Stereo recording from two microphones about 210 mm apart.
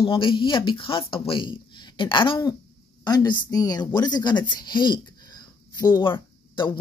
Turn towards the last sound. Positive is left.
turn(degrees=20)  # may be behind; listen again after turning